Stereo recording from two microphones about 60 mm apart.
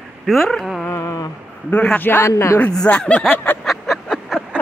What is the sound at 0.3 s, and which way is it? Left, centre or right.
Speech, centre.